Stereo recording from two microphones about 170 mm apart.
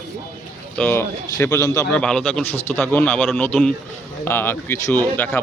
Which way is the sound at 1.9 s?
5° left (ahead or behind).